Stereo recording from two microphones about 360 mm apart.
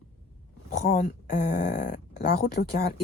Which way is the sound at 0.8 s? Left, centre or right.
Left.